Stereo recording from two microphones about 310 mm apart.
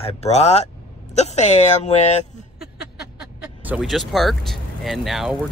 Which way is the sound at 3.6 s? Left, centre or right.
Centre.